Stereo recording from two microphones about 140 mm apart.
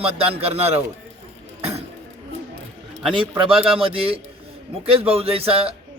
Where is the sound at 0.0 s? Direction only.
45° right (ahead or behind).